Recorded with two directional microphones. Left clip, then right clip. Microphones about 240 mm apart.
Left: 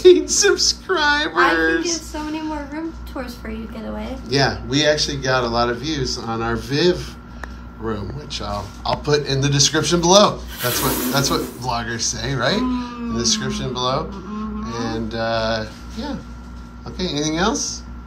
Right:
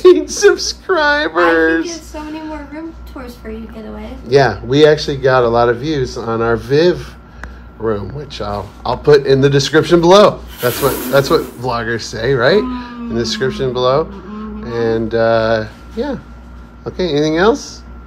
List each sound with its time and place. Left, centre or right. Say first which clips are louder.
0.3 s a man's voice: right 5 dB; centre
4.3 s a man's voice: right 8 dB; centre